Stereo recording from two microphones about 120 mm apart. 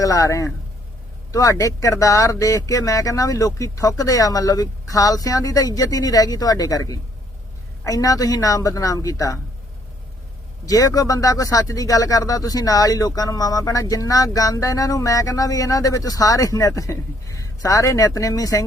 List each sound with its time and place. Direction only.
0.0 s speech: 30° left (ahead or behind)
10.7 s speech: 30° left (ahead or behind)